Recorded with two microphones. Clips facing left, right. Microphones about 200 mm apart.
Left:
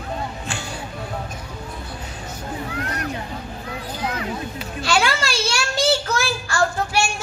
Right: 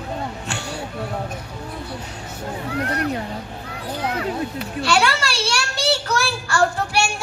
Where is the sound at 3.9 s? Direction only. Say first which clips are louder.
Right 4 dB; 60° right (ahead or behind).